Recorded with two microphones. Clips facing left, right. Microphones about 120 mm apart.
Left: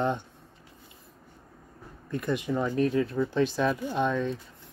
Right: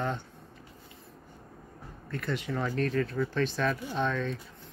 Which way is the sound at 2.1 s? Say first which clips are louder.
Left 5 dB; 15° left (ahead or behind).